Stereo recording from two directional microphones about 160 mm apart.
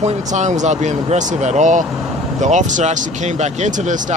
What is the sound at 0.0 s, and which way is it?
Speech, 50° right (ahead or behind).